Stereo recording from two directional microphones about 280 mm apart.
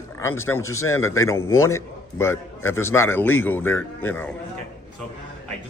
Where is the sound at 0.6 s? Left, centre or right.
Left.